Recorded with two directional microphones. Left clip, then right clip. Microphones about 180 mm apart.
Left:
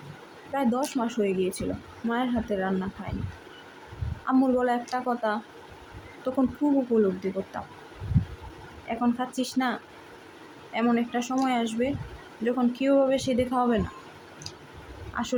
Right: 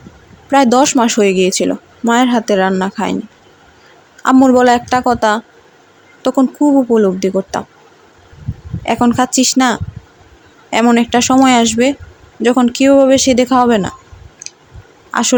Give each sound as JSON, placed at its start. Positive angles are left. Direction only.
{"t": 0.5, "sound": "speech", "side_deg": -60}
{"t": 4.4, "sound": "speech", "side_deg": -45}
{"t": 8.9, "sound": "speech", "side_deg": -60}
{"t": 15.1, "sound": "speech", "side_deg": -55}